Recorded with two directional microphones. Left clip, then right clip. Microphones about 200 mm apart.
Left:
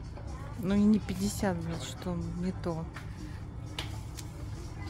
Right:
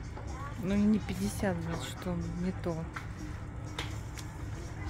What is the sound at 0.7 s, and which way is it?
A woman's voice, 15° left (ahead or behind).